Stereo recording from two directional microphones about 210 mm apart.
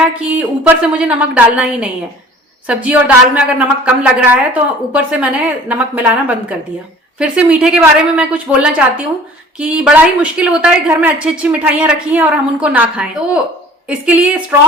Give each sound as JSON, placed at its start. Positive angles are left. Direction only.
{"t": 0.3, "sound": "a woman's voice", "side_deg": -5}